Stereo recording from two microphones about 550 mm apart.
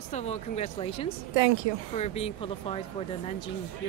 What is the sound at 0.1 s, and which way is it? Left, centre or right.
Speech, centre.